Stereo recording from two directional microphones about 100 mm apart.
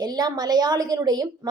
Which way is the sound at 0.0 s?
40° right (ahead or behind).